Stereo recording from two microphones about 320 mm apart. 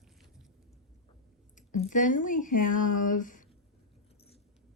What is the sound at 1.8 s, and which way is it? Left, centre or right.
Speech, left.